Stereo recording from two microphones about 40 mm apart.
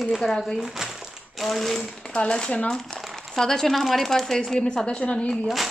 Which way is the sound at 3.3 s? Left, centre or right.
Centre.